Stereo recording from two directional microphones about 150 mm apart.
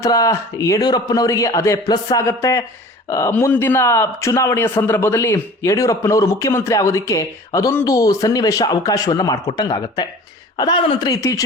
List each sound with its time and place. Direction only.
0.0 s a man's voice: 20° left (ahead or behind)